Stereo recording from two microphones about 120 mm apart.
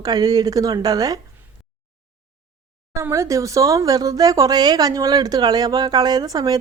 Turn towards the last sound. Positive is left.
turn(degrees=-35)  # may be behind; listen again after turning